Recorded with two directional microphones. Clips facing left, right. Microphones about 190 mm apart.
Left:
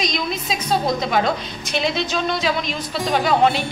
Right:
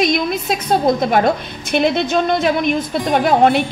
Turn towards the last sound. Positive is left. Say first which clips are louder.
# right 4 dB
turn(degrees=-55)  # may be behind; listen again after turning